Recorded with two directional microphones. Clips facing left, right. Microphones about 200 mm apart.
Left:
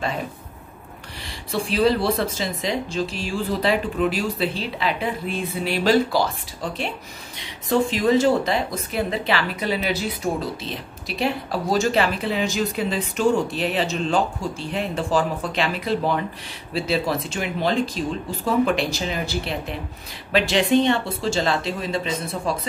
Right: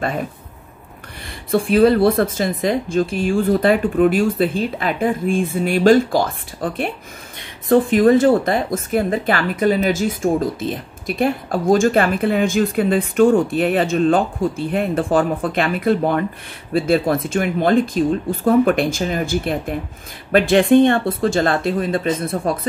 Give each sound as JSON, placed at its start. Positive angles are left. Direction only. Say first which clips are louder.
{"t": 1.5, "sound": "a woman's voice", "louder": "right 7 dB", "side_deg": -50}